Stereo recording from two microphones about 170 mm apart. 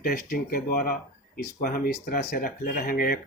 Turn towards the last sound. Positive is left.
turn(degrees=60)  # may be behind; listen again after turning